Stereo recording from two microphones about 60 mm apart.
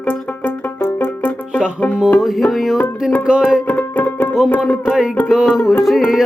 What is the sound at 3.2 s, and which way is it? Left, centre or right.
Music, centre.